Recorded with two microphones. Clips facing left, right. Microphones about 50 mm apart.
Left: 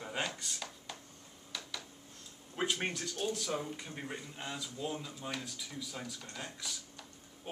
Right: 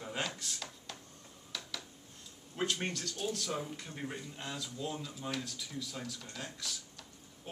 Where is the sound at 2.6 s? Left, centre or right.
Centre.